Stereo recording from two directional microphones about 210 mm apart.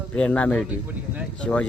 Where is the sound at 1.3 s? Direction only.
5° left (ahead or behind).